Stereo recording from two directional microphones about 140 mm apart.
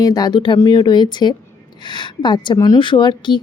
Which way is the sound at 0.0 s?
25° left (ahead or behind).